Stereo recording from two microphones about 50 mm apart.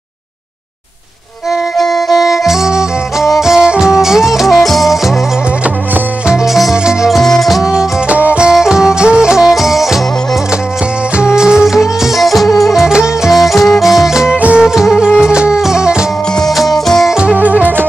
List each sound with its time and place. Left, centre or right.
1.8 s music: centre
6.4 s music: centre
7.1 s music: centre
8.1 s music: right
8.5 s music: centre
11.1 s music: centre
12.8 s music: centre
13.3 s music: centre
16.3 s music: centre
17.1 s music: centre
17.4 s music: right